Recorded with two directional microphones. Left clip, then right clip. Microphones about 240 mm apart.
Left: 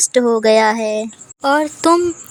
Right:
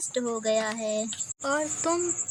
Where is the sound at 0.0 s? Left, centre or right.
Left.